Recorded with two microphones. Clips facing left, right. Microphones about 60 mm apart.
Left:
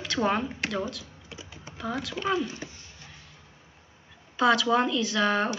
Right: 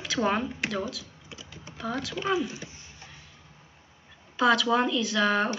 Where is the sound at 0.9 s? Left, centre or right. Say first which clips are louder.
Even; centre.